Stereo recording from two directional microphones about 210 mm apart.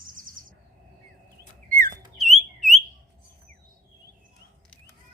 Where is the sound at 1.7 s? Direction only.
40° right (ahead or behind).